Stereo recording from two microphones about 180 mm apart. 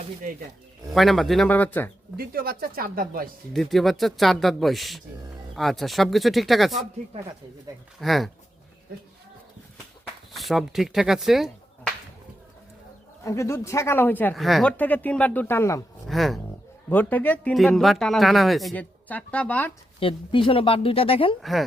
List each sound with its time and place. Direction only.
0.9 s speech: centre (ahead or behind)
2.1 s speech: 55° right (ahead or behind)
3.5 s speech: centre (ahead or behind)
8.0 s speech: centre (ahead or behind)
10.3 s speech: centre (ahead or behind)
13.2 s speech: 15° left (ahead or behind)
14.3 s speech: centre (ahead or behind)
16.0 s speech: centre (ahead or behind)
20.0 s speech: 30° left (ahead or behind)